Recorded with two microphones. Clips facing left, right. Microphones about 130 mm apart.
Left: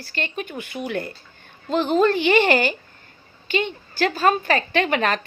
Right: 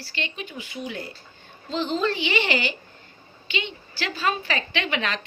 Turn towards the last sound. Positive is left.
turn(degrees=45)  # may be behind; listen again after turning